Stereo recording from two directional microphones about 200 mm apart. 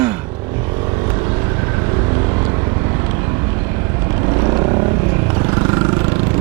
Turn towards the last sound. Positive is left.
turn(degrees=-25)  # may be behind; listen again after turning